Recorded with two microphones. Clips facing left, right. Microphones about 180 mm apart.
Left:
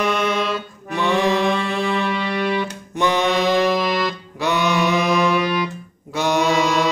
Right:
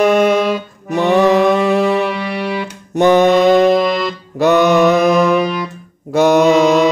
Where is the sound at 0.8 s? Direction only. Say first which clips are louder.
Right 7 dB; 40° right (ahead or behind).